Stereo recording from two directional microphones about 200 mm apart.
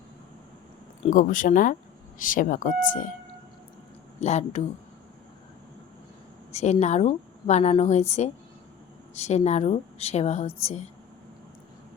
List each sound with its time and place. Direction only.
1.0 s a woman's voice: 40° left (ahead or behind)
4.2 s a woman's voice: 35° left (ahead or behind)
6.5 s a woman's voice: 35° left (ahead or behind)